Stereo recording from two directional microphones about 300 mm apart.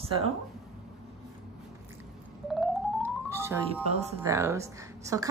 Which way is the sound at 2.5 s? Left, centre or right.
Centre.